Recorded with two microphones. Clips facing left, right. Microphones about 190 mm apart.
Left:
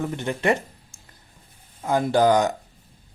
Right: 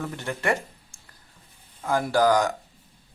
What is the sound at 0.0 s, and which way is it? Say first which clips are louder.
Speech: left 4 dB; 20° left (ahead or behind).